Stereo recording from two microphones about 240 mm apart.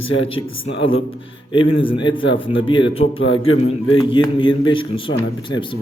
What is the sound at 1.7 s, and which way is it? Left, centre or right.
A man's voice, left.